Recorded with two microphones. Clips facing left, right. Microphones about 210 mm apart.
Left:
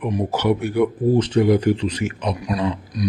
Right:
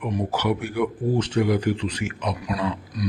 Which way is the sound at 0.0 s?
20° left (ahead or behind).